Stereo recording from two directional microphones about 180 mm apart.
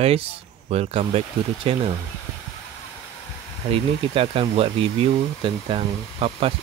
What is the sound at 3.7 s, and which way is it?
Speech, 30° right (ahead or behind).